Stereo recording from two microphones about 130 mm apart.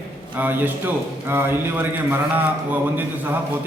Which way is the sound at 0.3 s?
15° right (ahead or behind).